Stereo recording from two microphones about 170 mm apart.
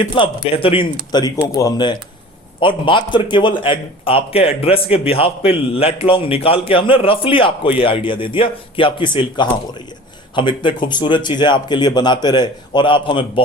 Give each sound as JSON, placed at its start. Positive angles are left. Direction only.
{"t": 0.2, "sound": "a man's voice", "side_deg": 35}
{"t": 1.1, "sound": "a man's voice", "side_deg": 20}